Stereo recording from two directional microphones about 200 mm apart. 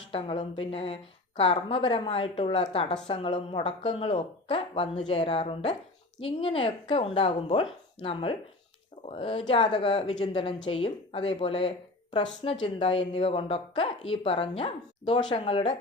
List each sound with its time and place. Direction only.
0.1 s a woman's voice: 30° left (ahead or behind)